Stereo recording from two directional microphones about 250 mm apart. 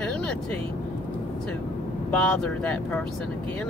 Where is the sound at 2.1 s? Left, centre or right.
Centre.